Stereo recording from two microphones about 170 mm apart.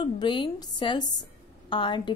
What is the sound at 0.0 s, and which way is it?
A woman's voice, 25° left (ahead or behind).